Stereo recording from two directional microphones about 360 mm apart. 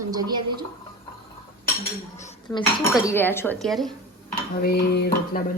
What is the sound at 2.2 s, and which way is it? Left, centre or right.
Cutlery, centre.